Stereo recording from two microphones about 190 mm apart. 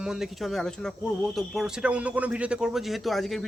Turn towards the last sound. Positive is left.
turn(degrees=0)  # may be behind; listen again after turning